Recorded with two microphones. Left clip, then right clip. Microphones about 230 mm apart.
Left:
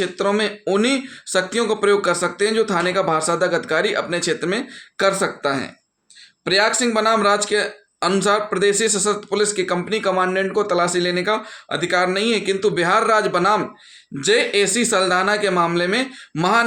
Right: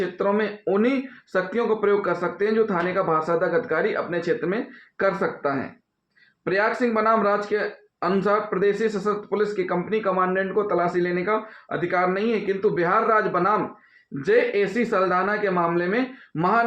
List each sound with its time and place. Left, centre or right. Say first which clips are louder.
0.0 s speech: left 3 dB; left
8.0 s speech: left 4 dB; left
10.0 s speech: left 4 dB; left
12.5 s speech: left 3 dB; left
12.9 s speech: left 4 dB; left